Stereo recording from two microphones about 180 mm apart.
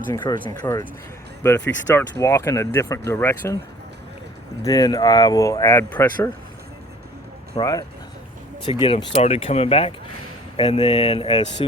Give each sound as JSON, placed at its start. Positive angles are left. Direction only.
{"t": 0.1, "sound": "speech", "side_deg": 25}
{"t": 0.6, "sound": "speech", "side_deg": 15}
{"t": 4.6, "sound": "speech", "side_deg": 20}
{"t": 7.6, "sound": "speech", "side_deg": 20}